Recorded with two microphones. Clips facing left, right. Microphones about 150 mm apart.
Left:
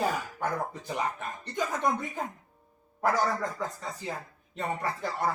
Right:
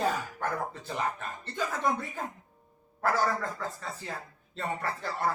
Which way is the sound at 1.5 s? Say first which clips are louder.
Left 1 dB; 15° left (ahead or behind).